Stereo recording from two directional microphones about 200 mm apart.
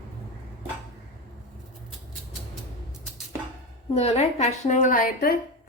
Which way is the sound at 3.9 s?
30° left (ahead or behind).